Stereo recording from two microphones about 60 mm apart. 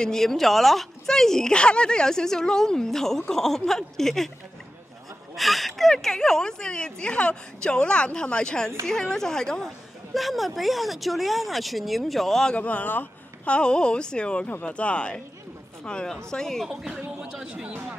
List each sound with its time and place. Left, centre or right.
0.0 s speech: centre
5.3 s speech: centre
10.1 s speech: centre
12.5 s speech: left
13.6 s speech: centre
16.6 s speech: centre